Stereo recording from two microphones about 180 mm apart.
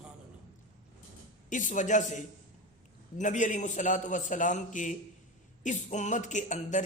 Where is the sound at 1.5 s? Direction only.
45° left (ahead or behind).